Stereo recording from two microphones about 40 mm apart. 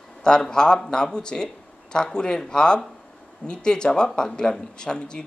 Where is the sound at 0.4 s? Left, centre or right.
Centre.